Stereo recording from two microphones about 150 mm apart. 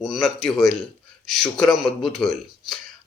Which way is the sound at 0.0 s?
Centre (ahead or behind).